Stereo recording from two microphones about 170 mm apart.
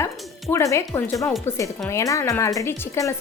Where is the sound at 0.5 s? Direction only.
15° left (ahead or behind).